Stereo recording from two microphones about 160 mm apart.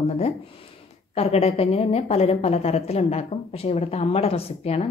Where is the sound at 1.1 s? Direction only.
40° left (ahead or behind).